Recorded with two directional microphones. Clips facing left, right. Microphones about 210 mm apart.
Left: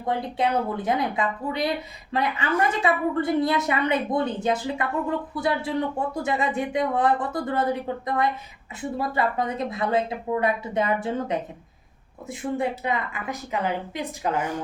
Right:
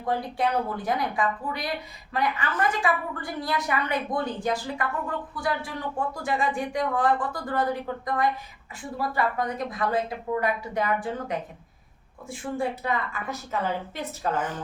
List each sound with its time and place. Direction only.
0.0 s a woman's voice: 25° left (ahead or behind)